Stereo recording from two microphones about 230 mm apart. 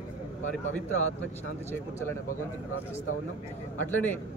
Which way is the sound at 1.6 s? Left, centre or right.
Centre.